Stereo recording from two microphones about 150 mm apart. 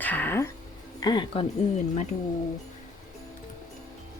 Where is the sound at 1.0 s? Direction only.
30° left (ahead or behind).